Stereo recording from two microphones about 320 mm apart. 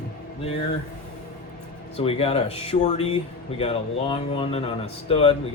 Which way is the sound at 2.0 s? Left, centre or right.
Centre.